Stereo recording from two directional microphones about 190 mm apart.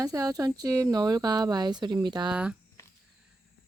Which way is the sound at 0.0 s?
20° right (ahead or behind).